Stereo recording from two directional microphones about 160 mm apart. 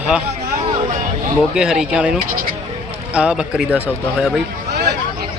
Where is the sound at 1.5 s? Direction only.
5° right (ahead or behind).